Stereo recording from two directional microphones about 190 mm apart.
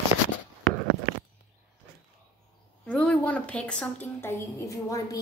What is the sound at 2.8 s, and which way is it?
A woman's voice, 5° left (ahead or behind).